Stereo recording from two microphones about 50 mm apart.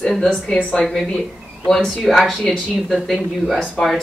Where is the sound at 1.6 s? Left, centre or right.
Centre.